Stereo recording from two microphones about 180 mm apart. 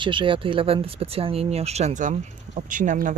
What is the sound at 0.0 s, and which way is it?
Speech, 25° right (ahead or behind).